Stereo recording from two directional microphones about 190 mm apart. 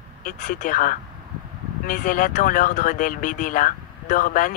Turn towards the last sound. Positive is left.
turn(degrees=45)  # may be behind; listen again after turning